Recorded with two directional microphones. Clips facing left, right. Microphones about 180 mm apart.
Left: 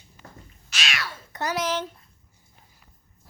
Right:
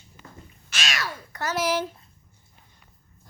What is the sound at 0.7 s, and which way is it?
Cat, 45° right (ahead or behind).